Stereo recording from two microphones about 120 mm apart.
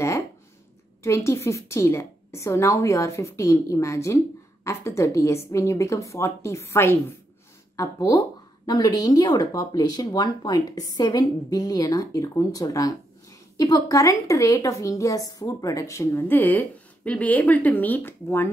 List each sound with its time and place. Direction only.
1.0 s a woman's voice: 25° left (ahead or behind)